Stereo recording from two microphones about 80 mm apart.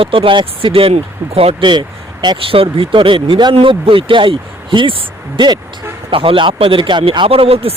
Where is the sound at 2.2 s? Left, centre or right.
Right.